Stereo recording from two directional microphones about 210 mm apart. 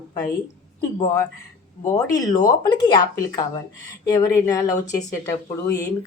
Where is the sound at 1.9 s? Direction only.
15° left (ahead or behind).